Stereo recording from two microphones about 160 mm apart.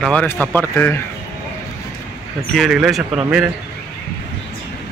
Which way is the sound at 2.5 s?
Centre (ahead or behind).